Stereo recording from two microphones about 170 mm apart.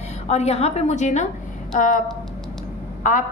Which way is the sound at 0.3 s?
40° left (ahead or behind).